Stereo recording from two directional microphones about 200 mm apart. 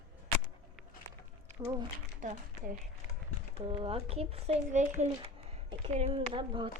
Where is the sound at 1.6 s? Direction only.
15° right (ahead or behind).